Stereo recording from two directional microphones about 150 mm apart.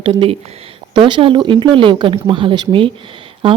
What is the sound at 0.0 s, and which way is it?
Speech, 35° right (ahead or behind).